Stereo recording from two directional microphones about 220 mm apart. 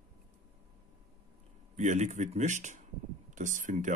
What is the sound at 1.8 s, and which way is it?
Speech, 35° right (ahead or behind).